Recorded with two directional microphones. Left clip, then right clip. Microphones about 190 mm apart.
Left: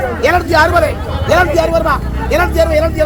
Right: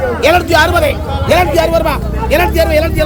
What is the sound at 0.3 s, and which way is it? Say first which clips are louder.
A man's voice: right 1 dB; 40° right (ahead or behind).